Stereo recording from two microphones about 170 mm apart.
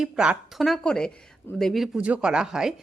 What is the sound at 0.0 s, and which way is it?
A woman's voice, 5° right (ahead or behind).